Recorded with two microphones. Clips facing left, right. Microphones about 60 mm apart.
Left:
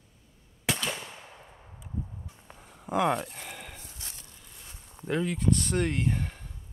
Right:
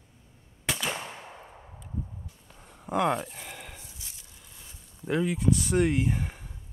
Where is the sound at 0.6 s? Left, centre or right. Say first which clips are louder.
Even; centre.